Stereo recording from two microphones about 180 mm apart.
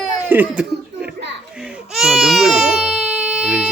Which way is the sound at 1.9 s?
Centre (ahead or behind).